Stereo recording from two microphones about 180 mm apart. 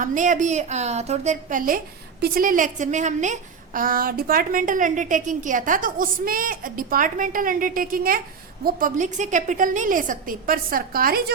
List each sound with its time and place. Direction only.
0.0 s a woman's voice: 45° right (ahead or behind)